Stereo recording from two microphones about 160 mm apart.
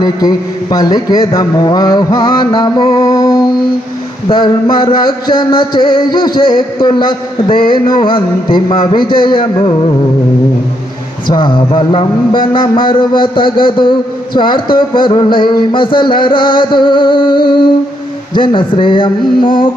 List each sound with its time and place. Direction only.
0.0 s music: 25° left (ahead or behind)
11.3 s a man's voice: 30° left (ahead or behind)